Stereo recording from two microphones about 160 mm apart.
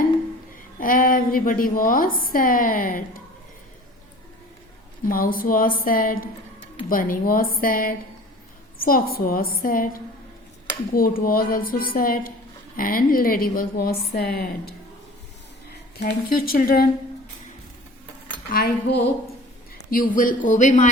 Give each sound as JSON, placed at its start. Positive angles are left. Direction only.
{"t": 0.8, "sound": "a woman's voice", "side_deg": 60}
{"t": 5.0, "sound": "a woman's voice", "side_deg": 65}
{"t": 11.2, "sound": "a woman's voice", "side_deg": 65}
{"t": 16.0, "sound": "speech", "side_deg": 80}
{"t": 18.5, "sound": "speech", "side_deg": 80}
{"t": 19.9, "sound": "speech", "side_deg": 60}